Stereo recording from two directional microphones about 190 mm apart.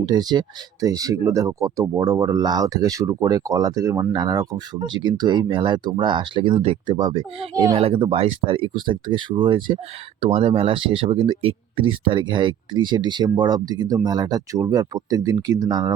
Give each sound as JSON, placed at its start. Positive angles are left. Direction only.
{"t": 0.0, "sound": "speech", "side_deg": -20}
{"t": 7.8, "sound": "speech", "side_deg": -30}